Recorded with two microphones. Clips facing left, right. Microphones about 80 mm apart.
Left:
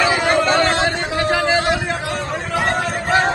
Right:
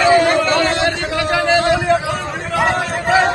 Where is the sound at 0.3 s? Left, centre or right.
Left.